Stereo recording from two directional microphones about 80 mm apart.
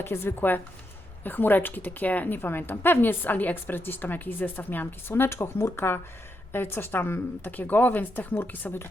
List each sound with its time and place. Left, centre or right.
0.0 s a woman's voice: left